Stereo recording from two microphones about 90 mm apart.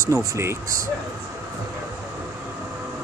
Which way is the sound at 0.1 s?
35° right (ahead or behind).